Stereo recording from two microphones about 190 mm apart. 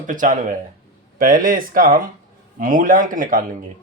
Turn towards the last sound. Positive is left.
turn(degrees=-45)  # may be behind; listen again after turning